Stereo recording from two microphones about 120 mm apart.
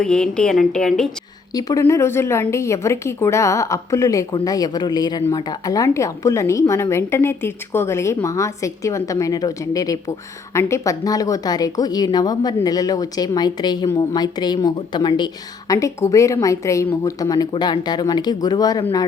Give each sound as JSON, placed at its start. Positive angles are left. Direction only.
{"t": 0.0, "sound": "a woman's voice", "side_deg": 5}
{"t": 1.5, "sound": "a woman's voice", "side_deg": 30}